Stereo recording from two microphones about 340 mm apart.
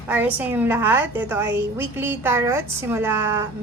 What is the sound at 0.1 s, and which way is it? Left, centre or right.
A woman's voice, centre.